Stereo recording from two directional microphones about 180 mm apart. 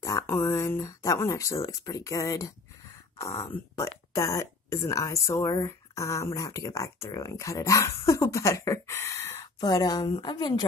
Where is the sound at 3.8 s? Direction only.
15° left (ahead or behind).